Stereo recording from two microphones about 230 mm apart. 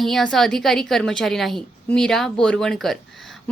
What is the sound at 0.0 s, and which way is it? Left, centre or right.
A woman's voice, centre.